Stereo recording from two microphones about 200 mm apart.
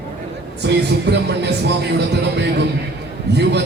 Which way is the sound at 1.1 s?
55° right (ahead or behind).